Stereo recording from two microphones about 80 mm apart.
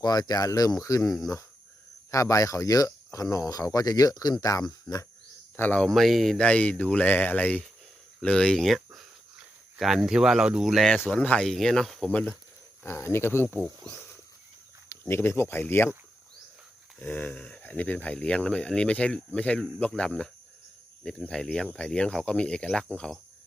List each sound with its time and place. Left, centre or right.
0.0 s speech: left
5.5 s speech: left
5.8 s speech: centre
6.4 s speech: centre
11.1 s speech: centre
12.0 s speech: centre
12.8 s speech: left
13.5 s speech: centre
14.8 s speech: left
17.0 s speech: left